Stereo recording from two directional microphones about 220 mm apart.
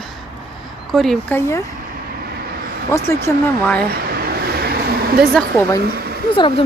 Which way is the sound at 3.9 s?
45° right (ahead or behind).